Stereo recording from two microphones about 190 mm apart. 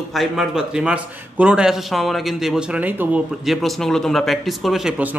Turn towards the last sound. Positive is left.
turn(degrees=-5)  # may be behind; listen again after turning